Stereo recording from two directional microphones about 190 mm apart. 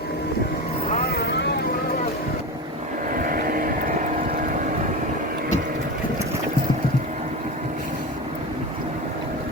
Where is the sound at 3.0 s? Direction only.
50° right (ahead or behind).